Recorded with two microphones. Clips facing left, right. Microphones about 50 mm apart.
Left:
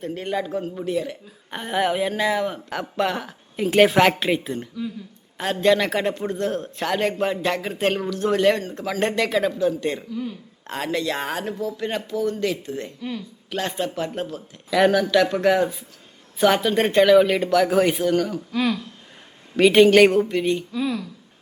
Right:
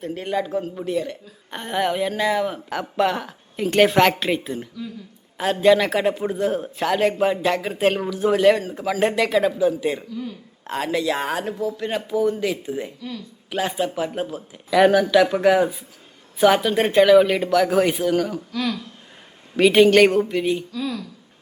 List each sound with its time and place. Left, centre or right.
0.0 s a man's voice: centre
13.0 s speech: left
13.5 s a man's voice: centre
18.5 s speech: left
19.5 s a man's voice: centre
20.7 s speech: centre